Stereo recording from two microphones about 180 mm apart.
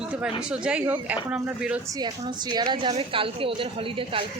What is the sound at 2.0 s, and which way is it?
A woman's voice, 25° right (ahead or behind).